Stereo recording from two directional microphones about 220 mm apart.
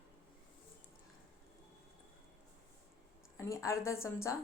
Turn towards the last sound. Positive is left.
turn(degrees=15)  # may be behind; listen again after turning